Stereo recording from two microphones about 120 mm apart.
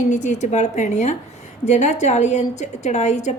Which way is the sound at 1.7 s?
75° left (ahead or behind).